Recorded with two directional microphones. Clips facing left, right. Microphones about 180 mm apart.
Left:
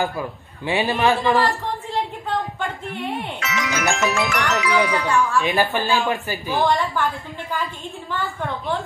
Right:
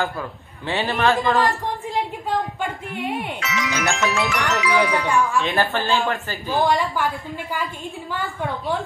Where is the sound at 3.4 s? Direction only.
50° left (ahead or behind).